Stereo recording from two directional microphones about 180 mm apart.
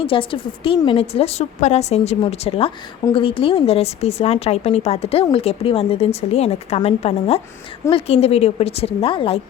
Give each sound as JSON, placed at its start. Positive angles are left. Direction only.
{"t": 0.0, "sound": "a woman's voice", "side_deg": 30}